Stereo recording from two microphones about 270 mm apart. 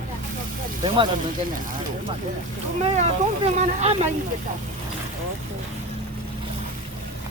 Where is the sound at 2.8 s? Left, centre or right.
Right.